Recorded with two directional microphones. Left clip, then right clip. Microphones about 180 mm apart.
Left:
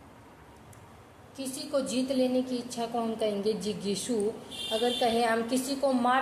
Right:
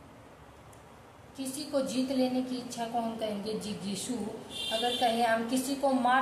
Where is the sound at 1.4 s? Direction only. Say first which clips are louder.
Left 1 dB; 50° left (ahead or behind).